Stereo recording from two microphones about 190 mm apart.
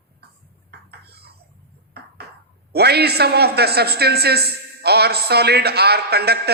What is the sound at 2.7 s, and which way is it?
A man's voice, 55° right (ahead or behind).